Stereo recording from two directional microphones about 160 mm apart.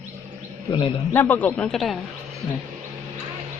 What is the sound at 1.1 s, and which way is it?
Speech, 10° left (ahead or behind).